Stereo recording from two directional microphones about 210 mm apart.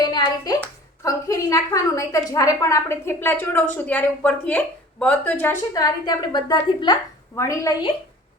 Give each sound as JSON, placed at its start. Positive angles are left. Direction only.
{"t": 0.0, "sound": "hands", "side_deg": 20}
{"t": 1.0, "sound": "a woman's voice", "side_deg": 15}